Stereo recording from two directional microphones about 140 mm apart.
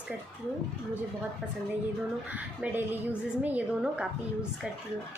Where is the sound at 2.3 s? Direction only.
10° right (ahead or behind).